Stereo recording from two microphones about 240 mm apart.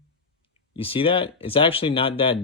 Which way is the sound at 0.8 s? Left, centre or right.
Left.